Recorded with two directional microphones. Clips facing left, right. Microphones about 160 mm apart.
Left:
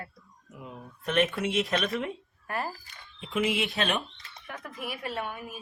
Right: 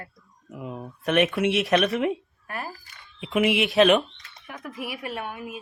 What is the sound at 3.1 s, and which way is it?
Speech, 75° right (ahead or behind).